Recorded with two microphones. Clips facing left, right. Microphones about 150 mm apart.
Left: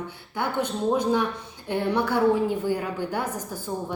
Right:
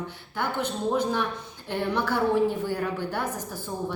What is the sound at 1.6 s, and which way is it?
A woman's voice, 10° left (ahead or behind).